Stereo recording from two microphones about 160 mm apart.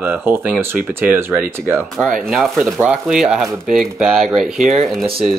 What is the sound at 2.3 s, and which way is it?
Speech, centre (ahead or behind).